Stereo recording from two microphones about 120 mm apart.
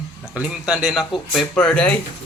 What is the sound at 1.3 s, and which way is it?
Speech, 10° left (ahead or behind).